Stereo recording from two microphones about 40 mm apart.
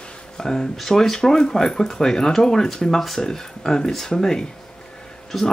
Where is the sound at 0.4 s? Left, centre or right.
Centre.